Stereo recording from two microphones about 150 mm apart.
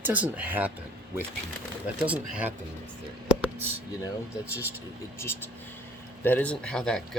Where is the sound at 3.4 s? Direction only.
15° right (ahead or behind).